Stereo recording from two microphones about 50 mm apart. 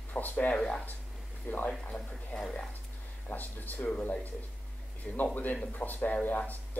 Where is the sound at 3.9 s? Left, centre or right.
Left.